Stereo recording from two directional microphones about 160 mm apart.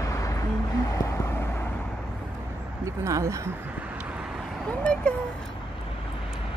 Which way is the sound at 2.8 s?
20° right (ahead or behind).